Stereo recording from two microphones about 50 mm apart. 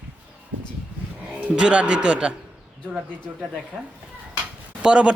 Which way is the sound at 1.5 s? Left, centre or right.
Right.